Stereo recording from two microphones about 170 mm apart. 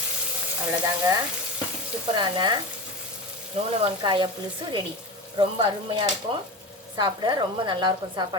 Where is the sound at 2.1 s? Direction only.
25° right (ahead or behind).